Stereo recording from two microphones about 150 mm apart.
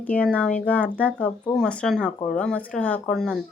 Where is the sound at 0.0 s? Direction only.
10° left (ahead or behind).